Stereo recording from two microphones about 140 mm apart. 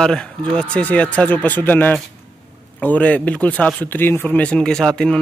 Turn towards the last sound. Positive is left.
turn(degrees=5)  # may be behind; listen again after turning